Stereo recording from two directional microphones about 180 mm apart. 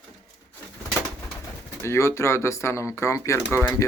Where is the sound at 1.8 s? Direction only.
15° left (ahead or behind).